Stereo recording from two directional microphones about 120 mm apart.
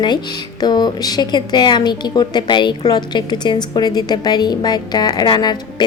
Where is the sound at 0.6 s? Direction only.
35° left (ahead or behind).